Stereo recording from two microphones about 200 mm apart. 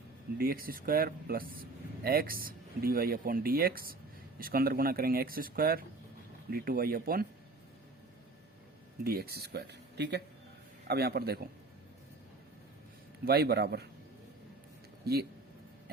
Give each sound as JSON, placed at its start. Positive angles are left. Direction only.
{"t": 0.3, "sound": "speech", "side_deg": -50}
{"t": 9.0, "sound": "speech", "side_deg": -50}
{"t": 13.2, "sound": "speech", "side_deg": -50}
{"t": 15.0, "sound": "speech", "side_deg": -50}